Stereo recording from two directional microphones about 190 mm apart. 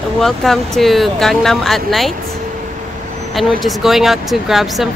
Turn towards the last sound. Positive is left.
turn(degrees=0)  # may be behind; listen again after turning